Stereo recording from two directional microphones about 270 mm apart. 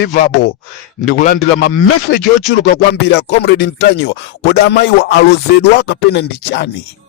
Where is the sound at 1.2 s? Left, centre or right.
Left.